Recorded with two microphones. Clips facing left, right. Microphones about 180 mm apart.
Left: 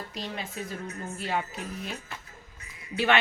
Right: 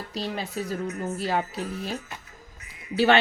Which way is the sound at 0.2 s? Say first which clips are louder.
Right 6 dB; 35° right (ahead or behind).